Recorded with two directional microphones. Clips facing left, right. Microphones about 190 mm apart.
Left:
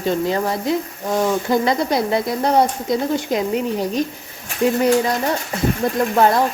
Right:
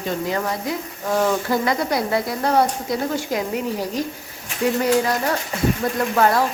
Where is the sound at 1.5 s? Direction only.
25° left (ahead or behind).